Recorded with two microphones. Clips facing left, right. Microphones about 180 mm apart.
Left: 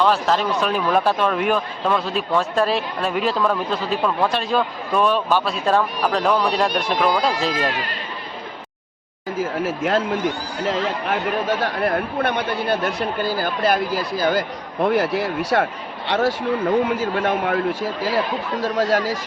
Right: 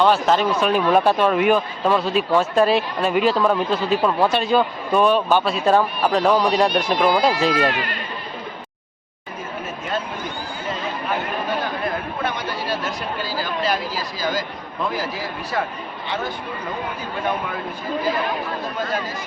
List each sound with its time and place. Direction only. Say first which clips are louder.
0.0 s speech: right 2 dB; centre (ahead or behind)
9.4 s speech: left 8 dB; 85° left
16.9 s speech: left 5 dB; 90° left